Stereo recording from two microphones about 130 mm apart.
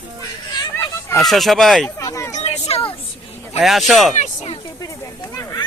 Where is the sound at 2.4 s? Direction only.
55° left (ahead or behind).